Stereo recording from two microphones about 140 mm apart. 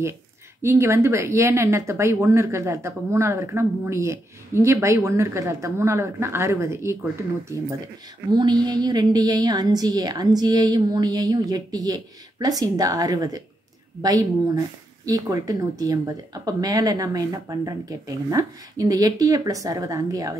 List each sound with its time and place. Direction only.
0.6 s speech: 20° right (ahead or behind)
8.3 s speech: 30° right (ahead or behind)